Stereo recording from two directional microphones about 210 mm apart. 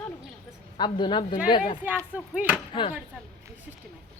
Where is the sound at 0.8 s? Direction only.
20° left (ahead or behind).